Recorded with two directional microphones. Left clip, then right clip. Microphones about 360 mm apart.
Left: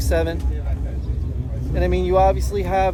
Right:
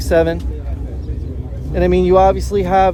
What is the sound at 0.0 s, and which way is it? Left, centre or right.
Speech, right.